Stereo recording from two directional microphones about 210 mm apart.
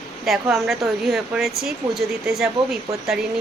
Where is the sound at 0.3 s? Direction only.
Centre (ahead or behind).